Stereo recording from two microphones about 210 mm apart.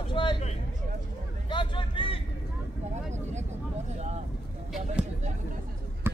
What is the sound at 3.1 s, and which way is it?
Vehicle, 35° right (ahead or behind).